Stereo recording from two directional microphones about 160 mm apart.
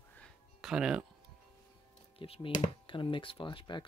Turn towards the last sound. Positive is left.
turn(degrees=30)  # may be behind; listen again after turning